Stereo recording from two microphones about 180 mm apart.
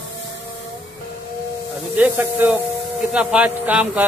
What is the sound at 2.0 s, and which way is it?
Speech, 10° right (ahead or behind).